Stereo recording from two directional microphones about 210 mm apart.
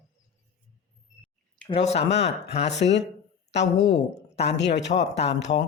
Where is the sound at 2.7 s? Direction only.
55° left (ahead or behind).